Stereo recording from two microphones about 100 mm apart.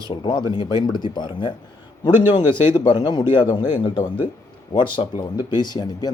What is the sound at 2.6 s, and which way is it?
A man's voice, 50° left (ahead or behind).